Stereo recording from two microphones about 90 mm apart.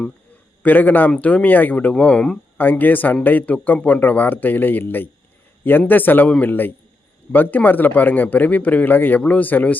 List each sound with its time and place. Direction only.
0.6 s speech: 20° left (ahead or behind)
2.6 s speech: 20° left (ahead or behind)